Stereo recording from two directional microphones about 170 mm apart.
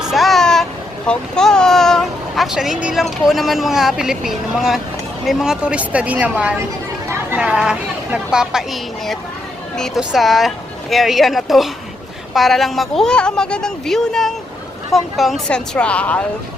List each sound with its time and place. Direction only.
0.1 s a woman's voice: centre (ahead or behind)